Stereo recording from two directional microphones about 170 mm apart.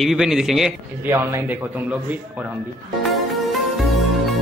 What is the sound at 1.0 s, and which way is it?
Speech, 15° right (ahead or behind).